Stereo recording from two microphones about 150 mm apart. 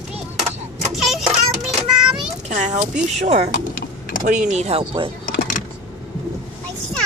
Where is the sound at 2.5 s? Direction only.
55° right (ahead or behind).